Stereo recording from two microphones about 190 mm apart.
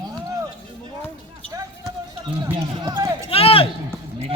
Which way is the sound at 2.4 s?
25° right (ahead or behind).